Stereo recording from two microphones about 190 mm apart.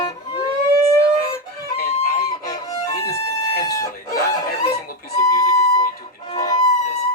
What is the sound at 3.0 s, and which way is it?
Chicken, 20° left (ahead or behind).